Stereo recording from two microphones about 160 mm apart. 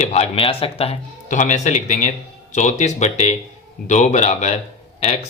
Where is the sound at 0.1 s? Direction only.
40° left (ahead or behind).